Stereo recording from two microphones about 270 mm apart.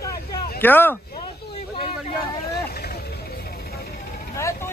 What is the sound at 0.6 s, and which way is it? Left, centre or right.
Speech, centre.